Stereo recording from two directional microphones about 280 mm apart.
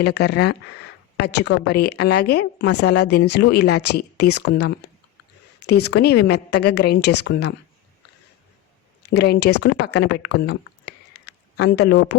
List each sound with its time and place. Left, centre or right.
0.2 s a woman's voice: left
9.0 s speech: left